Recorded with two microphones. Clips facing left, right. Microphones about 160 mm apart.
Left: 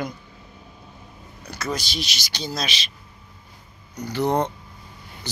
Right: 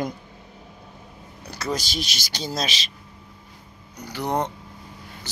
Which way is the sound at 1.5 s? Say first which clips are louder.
Right 1 dB; 35° right (ahead or behind).